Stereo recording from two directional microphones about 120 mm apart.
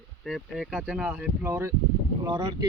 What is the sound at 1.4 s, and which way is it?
Speech, 20° right (ahead or behind).